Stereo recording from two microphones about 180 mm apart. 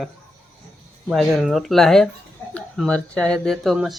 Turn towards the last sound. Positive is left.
turn(degrees=0)  # may be behind; listen again after turning